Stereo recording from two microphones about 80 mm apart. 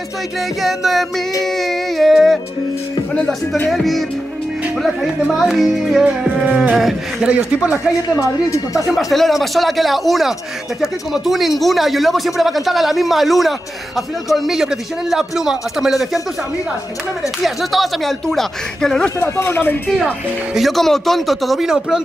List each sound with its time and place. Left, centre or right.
0.6 s speech: centre
1.4 s music: centre
3.7 s speech: centre
5.4 s speech: centre
6.0 s music: centre
6.8 s speech: centre
7.2 s music: centre
8.2 s a woman's voice: left
8.9 s speech: centre
17.4 s speech: centre
19.1 s a woman's voice: left
20.5 s speech: centre